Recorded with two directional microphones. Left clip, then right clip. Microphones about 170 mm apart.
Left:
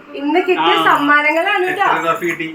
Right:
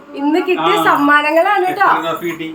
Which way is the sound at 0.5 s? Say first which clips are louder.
Left 1 dB; 5° left (ahead or behind).